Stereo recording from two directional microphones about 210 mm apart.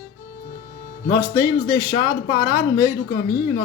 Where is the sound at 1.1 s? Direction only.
15° left (ahead or behind).